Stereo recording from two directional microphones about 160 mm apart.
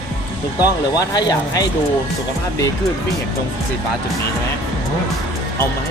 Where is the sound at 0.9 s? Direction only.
25° left (ahead or behind).